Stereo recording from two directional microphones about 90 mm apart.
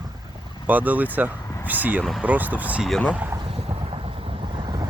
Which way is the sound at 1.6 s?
20° right (ahead or behind).